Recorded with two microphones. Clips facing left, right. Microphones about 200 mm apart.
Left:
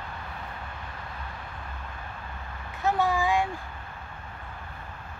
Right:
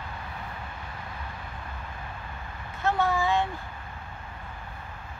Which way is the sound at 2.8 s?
15° left (ahead or behind).